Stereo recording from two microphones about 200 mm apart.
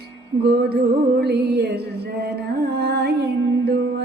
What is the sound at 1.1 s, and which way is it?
Music, 55° right (ahead or behind).